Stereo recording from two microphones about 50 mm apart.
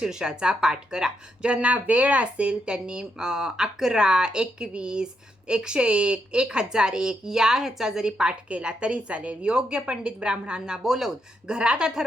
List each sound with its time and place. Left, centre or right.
0.0 s a woman's voice: centre